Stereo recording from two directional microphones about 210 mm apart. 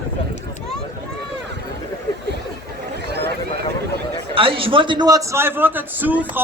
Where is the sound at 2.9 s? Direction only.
50° right (ahead or behind).